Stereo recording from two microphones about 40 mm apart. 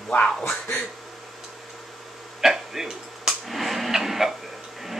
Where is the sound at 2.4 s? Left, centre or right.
Centre.